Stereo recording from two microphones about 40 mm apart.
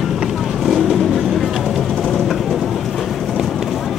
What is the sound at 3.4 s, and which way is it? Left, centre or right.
Run, centre.